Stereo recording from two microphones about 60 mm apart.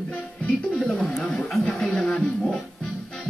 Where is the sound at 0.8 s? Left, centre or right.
Centre.